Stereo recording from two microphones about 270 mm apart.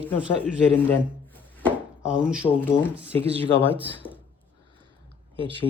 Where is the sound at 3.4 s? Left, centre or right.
Centre.